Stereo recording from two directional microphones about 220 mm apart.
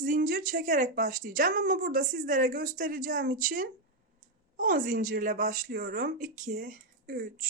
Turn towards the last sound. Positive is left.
turn(degrees=-40)  # may be behind; listen again after turning